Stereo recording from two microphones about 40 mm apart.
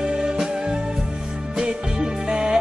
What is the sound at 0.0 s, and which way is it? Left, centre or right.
Music, centre.